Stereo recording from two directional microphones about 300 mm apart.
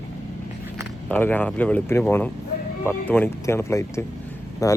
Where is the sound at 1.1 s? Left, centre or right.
Centre.